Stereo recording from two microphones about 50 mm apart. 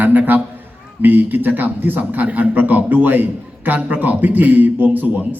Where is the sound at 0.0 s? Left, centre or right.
Right.